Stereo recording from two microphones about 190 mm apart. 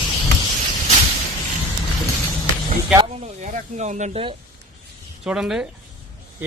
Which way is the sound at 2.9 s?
25° right (ahead or behind).